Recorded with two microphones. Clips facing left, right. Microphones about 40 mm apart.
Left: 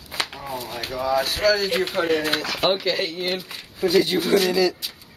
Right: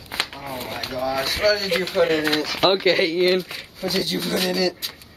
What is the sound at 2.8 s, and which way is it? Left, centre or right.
Speech, right.